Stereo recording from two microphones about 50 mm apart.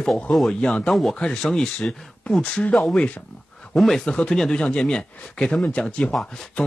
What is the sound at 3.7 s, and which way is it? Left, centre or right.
Speech, centre.